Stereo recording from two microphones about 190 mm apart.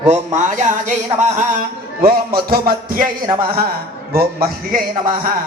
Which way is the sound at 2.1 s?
50° right (ahead or behind).